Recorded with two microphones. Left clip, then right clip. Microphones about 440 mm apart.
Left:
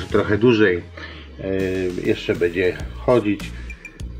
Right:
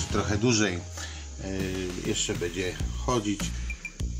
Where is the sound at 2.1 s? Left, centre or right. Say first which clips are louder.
Left 10 dB; left.